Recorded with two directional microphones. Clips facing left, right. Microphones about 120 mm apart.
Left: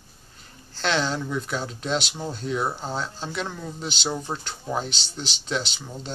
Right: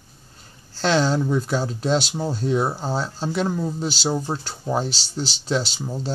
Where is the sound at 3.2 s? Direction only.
35° right (ahead or behind).